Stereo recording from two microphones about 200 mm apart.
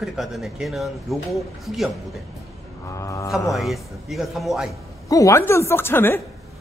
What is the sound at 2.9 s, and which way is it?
Speech, 15° left (ahead or behind).